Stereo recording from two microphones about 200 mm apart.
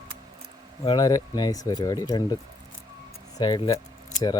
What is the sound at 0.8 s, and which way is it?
Speech, 20° left (ahead or behind).